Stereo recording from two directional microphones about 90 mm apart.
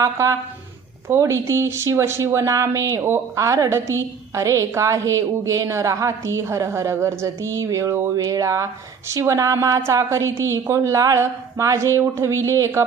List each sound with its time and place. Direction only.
0.0 s a woman's voice: 35° right (ahead or behind)
8.1 s a woman's voice: 40° right (ahead or behind)